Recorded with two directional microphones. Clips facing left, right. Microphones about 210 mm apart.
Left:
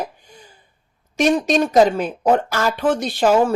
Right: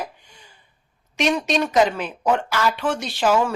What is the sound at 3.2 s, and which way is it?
Speech, 35° left (ahead or behind).